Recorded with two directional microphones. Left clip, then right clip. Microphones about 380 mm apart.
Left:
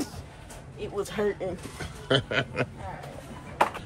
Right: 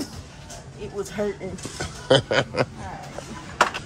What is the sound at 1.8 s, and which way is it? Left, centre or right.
Speech, centre.